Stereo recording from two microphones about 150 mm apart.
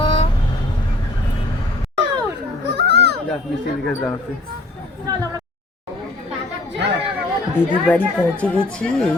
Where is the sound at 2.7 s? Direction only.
90° right.